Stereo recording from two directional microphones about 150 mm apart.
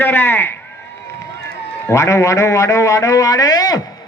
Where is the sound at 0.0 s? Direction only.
15° left (ahead or behind).